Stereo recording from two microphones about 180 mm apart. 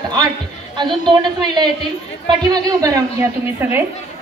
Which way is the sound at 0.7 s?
25° right (ahead or behind).